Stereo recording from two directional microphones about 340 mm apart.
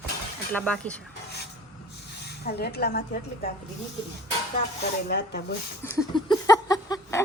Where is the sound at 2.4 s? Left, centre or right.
Left.